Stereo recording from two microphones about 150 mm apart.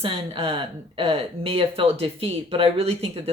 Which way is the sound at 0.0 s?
40° right (ahead or behind).